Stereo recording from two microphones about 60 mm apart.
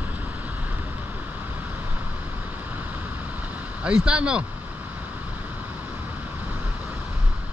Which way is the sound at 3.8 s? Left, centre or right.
Centre.